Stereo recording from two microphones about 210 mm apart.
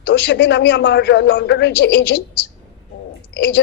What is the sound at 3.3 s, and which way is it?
Speech, 60° left (ahead or behind).